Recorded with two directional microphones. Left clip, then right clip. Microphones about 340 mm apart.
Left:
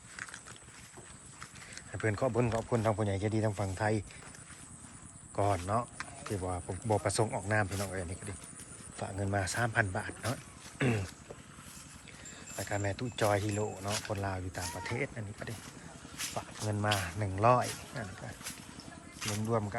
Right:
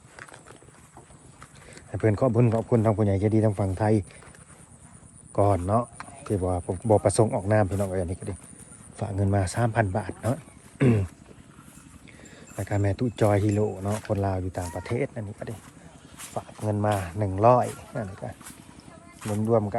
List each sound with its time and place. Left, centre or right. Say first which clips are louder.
1.7 s clip-clop: right 9 dB; centre
2.6 s speech: right 9 dB; right
2.8 s speech: right 8 dB; centre
5.4 s speech: right 8 dB; centre
12.5 s speech: right 7 dB; centre
18.2 s speech: right 5 dB; centre